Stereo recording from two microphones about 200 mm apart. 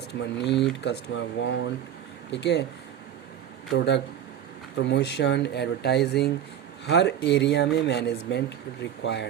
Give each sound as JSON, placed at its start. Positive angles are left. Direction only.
{"t": 0.1, "sound": "speech", "side_deg": 60}
{"t": 3.7, "sound": "speech", "side_deg": 60}